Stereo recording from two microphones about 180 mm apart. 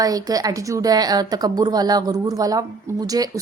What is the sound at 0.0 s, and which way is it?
A woman's voice, 20° right (ahead or behind).